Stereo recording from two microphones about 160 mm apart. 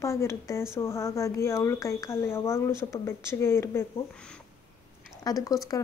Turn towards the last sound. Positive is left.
turn(degrees=20)  # may be behind; listen again after turning